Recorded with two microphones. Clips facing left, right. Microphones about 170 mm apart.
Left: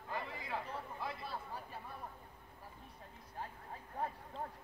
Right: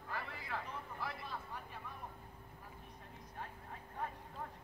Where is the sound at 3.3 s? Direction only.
30° left (ahead or behind).